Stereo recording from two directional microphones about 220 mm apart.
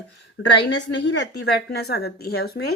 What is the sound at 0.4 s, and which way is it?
A woman's voice, 50° left (ahead or behind).